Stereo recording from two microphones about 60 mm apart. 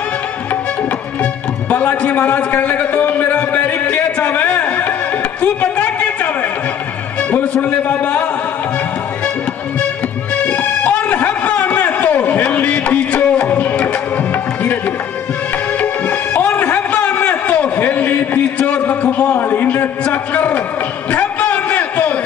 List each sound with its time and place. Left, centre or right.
1.2 s music: left
5.4 s a sound: left
7.2 s music: left
7.6 s a man's voice: left
10.4 s music: left
15.8 s music: left
18.8 s a sound: left